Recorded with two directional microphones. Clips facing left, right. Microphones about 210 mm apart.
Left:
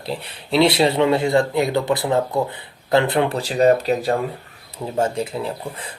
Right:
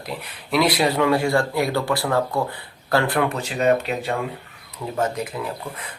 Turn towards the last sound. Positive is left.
turn(degrees=30)  # may be behind; listen again after turning